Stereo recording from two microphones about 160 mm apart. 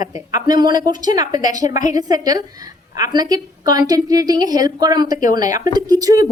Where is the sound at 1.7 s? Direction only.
50° left (ahead or behind).